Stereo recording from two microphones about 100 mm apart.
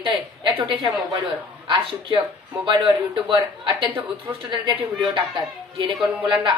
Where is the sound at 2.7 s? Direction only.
50° right (ahead or behind).